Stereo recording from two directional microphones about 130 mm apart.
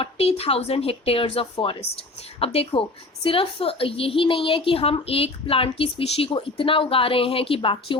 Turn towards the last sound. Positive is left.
turn(degrees=45)  # may be behind; listen again after turning